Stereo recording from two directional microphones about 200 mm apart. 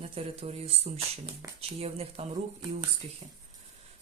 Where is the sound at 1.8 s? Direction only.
30° right (ahead or behind).